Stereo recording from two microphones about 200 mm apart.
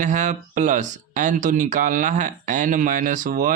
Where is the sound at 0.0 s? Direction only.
40° right (ahead or behind).